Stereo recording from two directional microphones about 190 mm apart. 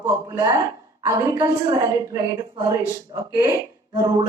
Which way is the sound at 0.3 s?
20° right (ahead or behind).